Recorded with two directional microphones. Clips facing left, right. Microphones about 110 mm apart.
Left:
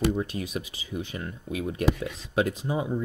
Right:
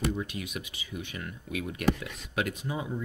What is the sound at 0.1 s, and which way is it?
Speech, 35° left (ahead or behind).